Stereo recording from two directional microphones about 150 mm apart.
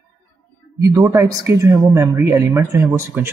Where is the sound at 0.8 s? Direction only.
20° right (ahead or behind).